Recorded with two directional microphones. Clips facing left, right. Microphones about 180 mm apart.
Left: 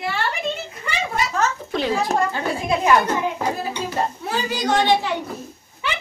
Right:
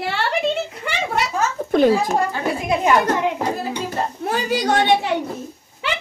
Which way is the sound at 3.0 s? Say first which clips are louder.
Right 3 dB; 70° right (ahead or behind).